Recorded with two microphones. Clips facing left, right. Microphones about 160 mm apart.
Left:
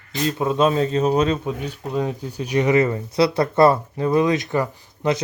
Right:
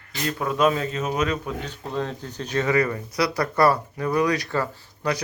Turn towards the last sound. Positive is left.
turn(degrees=20)  # may be behind; listen again after turning